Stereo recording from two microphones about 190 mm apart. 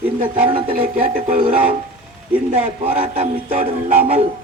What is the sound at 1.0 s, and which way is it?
Speech, 45° right (ahead or behind).